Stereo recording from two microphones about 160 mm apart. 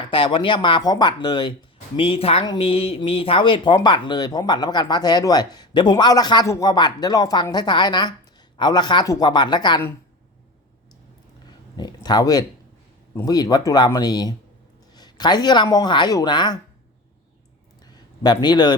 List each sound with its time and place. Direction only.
0.0 s speech: 30° left (ahead or behind)
11.4 s a sound: 25° left (ahead or behind)
13.1 s speech: 25° left (ahead or behind)
18.2 s speech: 25° left (ahead or behind)